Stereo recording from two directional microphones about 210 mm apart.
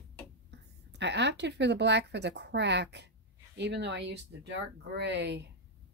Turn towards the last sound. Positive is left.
turn(degrees=-55)  # may be behind; listen again after turning